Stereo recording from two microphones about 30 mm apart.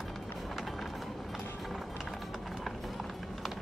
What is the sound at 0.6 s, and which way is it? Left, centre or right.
Train, centre.